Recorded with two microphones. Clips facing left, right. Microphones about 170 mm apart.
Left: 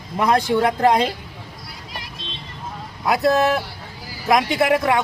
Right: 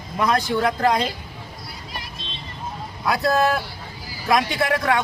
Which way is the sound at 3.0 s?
20° left (ahead or behind).